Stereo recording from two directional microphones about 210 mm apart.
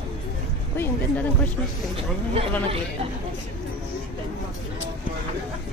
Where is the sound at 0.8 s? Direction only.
10° left (ahead or behind).